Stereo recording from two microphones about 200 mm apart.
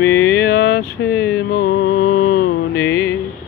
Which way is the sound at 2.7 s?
15° left (ahead or behind).